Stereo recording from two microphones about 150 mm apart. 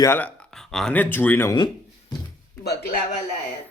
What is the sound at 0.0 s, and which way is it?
Speech, 15° left (ahead or behind).